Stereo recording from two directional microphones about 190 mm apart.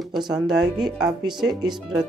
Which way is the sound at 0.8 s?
Centre (ahead or behind).